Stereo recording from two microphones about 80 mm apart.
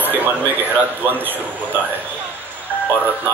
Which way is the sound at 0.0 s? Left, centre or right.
Right.